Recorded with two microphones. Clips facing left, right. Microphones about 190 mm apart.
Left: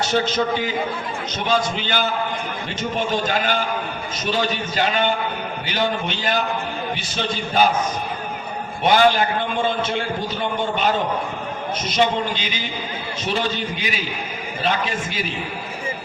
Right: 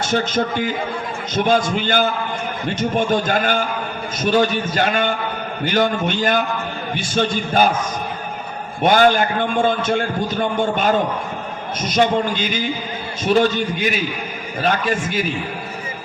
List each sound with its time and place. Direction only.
0.0 s a man's voice: 50° right (ahead or behind)
8.8 s a man's voice: 50° right (ahead or behind)